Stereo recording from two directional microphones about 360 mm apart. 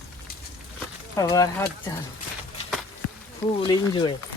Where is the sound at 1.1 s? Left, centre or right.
Centre.